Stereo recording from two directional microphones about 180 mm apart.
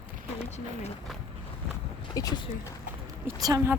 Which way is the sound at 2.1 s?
20° left (ahead or behind).